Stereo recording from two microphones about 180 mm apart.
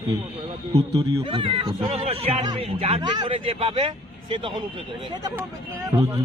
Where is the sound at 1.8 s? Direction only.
35° right (ahead or behind).